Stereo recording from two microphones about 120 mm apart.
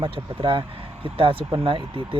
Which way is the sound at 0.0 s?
40° right (ahead or behind).